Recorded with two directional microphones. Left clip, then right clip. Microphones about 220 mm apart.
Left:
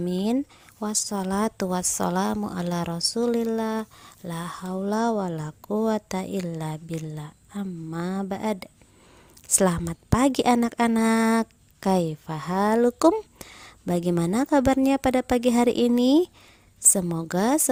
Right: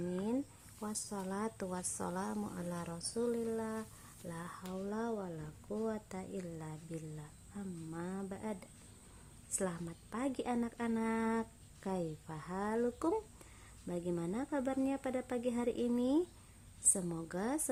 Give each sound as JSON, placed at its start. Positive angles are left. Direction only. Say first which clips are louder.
{"t": 0.1, "sound": "a woman's voice", "louder": "left 12 dB", "side_deg": 45}